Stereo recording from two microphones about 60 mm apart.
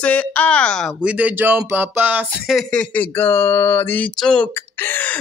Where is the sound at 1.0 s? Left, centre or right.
Right.